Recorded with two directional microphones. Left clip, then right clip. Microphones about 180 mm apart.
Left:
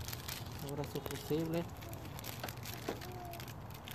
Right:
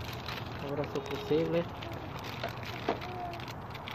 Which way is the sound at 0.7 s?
25° left (ahead or behind).